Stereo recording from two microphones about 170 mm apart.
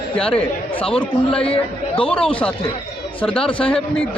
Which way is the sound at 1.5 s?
35° left (ahead or behind).